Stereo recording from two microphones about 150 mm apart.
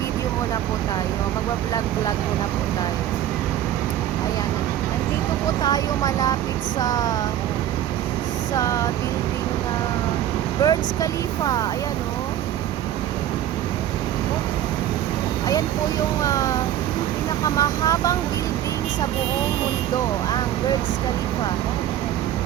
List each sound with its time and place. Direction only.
5.6 s speech: 25° left (ahead or behind)
8.5 s speech: 20° left (ahead or behind)
10.6 s speech: 25° left (ahead or behind)
16.2 s speech: 20° left (ahead or behind)
17.6 s speech: 20° left (ahead or behind)